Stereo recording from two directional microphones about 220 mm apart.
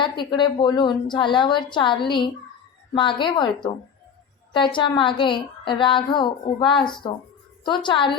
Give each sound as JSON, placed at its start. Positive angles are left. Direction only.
{"t": 0.0, "sound": "a woman's voice", "side_deg": 20}